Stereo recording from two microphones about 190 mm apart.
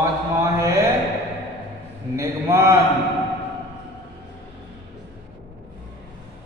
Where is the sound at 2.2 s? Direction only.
15° right (ahead or behind).